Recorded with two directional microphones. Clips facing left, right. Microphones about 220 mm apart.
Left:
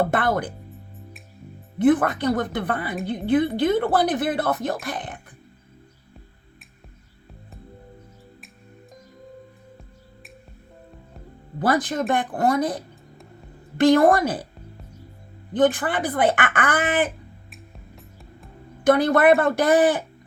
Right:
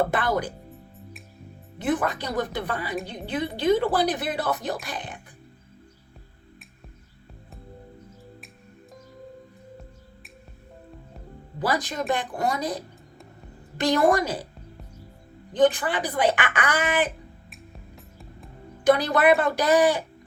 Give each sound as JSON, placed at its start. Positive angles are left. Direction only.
{"t": 0.1, "sound": "speech", "side_deg": 55}
{"t": 1.8, "sound": "speech", "side_deg": 55}
{"t": 11.6, "sound": "speech", "side_deg": 55}
{"t": 15.6, "sound": "speech", "side_deg": 55}
{"t": 17.5, "sound": "music", "side_deg": 0}
{"t": 18.9, "sound": "speech", "side_deg": 55}